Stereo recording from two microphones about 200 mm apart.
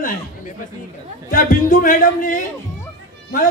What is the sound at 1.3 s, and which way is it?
A man's voice, 45° left (ahead or behind).